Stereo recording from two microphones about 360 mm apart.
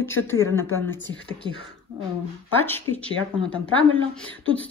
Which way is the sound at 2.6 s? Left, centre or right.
Centre.